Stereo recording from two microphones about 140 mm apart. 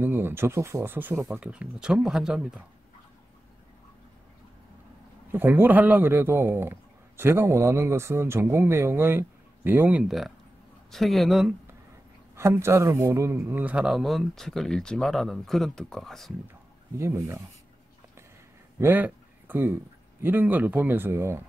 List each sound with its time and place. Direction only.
0.0 s a man's voice: 15° right (ahead or behind)
5.3 s a man's voice: 15° right (ahead or behind)
12.4 s a man's voice: 20° right (ahead or behind); by 16.3 s centre (ahead or behind)
17.0 s speech: 20° right (ahead or behind)
18.8 s speech: 15° right (ahead or behind)